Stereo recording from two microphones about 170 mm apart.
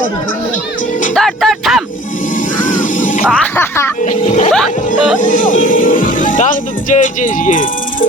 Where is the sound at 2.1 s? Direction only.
50° left (ahead or behind).